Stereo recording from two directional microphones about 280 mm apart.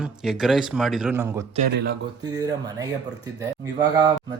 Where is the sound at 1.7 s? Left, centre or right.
Right.